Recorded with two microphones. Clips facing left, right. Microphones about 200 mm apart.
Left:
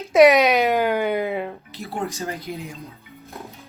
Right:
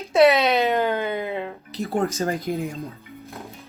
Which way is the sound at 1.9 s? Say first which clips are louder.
Right 5 dB; 50° right (ahead or behind).